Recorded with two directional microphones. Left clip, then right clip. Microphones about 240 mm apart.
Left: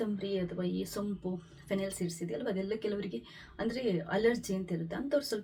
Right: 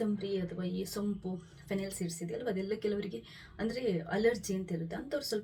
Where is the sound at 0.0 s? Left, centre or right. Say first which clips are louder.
Even; centre.